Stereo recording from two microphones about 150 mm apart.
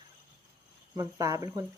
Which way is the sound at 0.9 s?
20° right (ahead or behind).